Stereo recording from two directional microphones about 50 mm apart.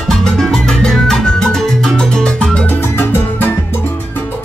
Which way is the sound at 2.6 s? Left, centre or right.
Left.